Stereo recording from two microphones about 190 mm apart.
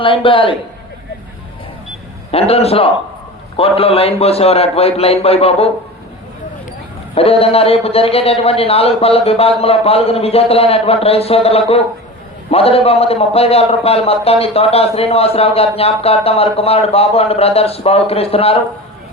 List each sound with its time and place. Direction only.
0.0 s a man's voice: 25° left (ahead or behind)
2.3 s a man's voice: 30° left (ahead or behind)
7.2 s a man's voice: 30° left (ahead or behind)